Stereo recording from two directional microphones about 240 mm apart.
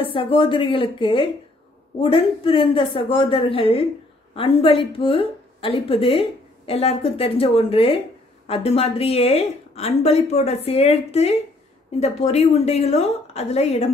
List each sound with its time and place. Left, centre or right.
0.0 s a woman's voice: left